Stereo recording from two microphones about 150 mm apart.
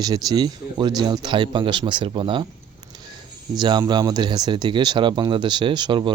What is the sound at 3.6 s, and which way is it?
Speech, 30° right (ahead or behind).